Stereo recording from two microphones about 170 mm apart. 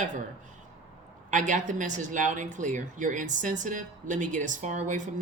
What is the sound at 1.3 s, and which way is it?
A woman's voice, 50° right (ahead or behind).